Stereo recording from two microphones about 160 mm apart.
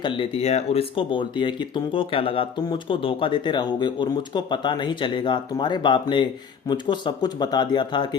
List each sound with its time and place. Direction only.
0.0 s speech: 35° left (ahead or behind)